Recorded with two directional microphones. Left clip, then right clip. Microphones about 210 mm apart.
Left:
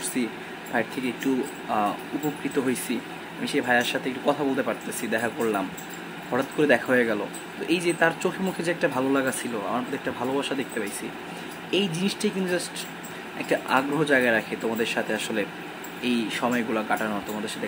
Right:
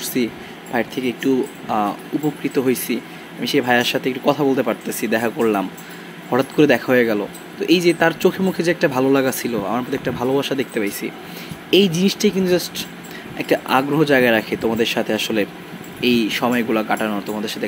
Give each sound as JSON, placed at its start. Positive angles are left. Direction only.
{"t": 0.2, "sound": "speech", "side_deg": -20}